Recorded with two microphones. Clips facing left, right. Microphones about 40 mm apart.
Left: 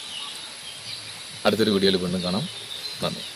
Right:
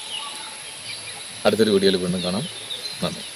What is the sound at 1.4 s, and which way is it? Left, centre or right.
Speech, centre.